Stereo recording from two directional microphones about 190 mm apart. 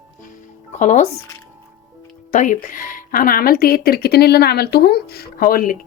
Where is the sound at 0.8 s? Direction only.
40° left (ahead or behind).